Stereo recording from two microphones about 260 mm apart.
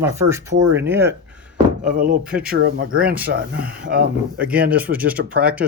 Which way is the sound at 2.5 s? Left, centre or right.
Right.